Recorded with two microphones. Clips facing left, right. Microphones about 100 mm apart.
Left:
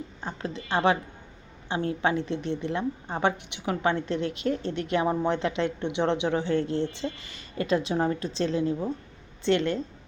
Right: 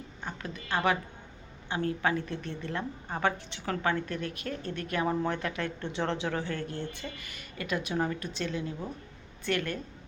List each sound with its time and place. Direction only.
0.2 s a woman's voice: 30° left (ahead or behind)